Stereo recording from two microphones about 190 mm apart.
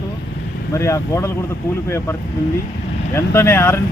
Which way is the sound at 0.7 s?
15° left (ahead or behind).